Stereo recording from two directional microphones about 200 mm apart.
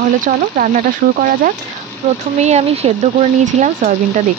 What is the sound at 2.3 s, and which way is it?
Speech, 35° right (ahead or behind).